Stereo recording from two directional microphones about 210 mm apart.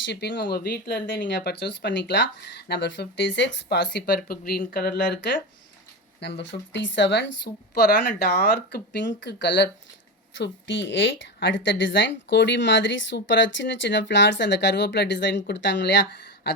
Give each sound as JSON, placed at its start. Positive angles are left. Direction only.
{"t": 0.0, "sound": "speech", "side_deg": 55}